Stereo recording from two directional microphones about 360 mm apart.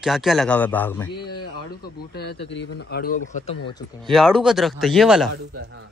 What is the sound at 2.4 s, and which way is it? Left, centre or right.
Speech, left.